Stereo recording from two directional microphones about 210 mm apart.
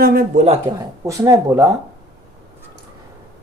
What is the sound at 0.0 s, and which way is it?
Speech, 45° right (ahead or behind).